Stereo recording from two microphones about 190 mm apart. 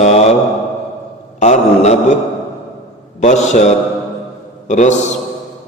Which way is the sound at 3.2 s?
35° left (ahead or behind).